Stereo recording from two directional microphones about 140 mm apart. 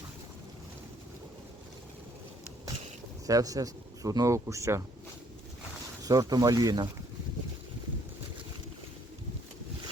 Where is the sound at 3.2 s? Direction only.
25° right (ahead or behind).